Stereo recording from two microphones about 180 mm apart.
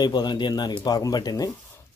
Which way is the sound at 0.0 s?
25° left (ahead or behind).